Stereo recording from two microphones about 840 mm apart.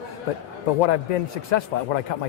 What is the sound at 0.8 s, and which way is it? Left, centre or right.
A man's voice, left.